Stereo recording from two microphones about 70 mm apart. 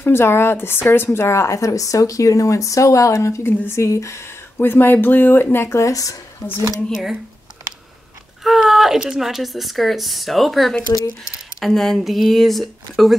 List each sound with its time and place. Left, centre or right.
0.0 s a woman's voice: left
5.7 s a woman's voice: left
6.9 s speech: centre
8.5 s speech: centre